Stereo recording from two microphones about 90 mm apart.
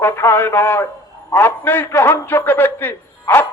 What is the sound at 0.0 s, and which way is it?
Speech, 25° left (ahead or behind).